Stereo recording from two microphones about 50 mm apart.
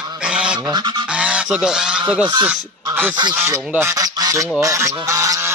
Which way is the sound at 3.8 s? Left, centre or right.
Right.